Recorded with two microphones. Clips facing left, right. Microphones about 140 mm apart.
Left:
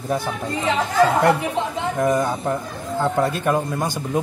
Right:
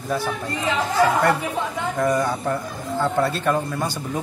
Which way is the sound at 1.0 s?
25° left (ahead or behind).